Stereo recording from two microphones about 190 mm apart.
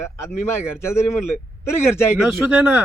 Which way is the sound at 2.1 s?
5° right (ahead or behind).